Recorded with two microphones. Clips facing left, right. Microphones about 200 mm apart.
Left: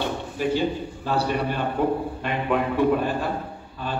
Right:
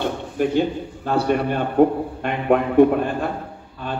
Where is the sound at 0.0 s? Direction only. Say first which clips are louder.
Right 4 dB; 55° right (ahead or behind).